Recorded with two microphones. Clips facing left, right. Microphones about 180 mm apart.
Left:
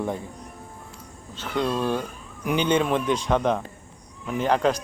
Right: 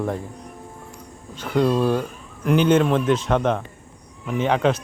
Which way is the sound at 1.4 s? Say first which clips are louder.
Right 6 dB; 5° right (ahead or behind).